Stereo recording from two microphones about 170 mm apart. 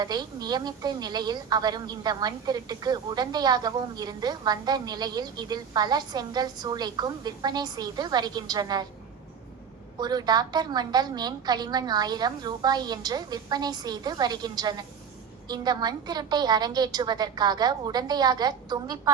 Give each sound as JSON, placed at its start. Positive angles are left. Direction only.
{"t": 0.0, "sound": "speech", "side_deg": -25}
{"t": 10.0, "sound": "speech", "side_deg": -25}